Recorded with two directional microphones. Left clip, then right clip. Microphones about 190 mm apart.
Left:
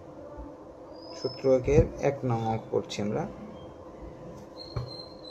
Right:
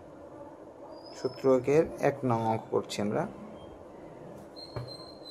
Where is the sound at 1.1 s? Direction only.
15° right (ahead or behind).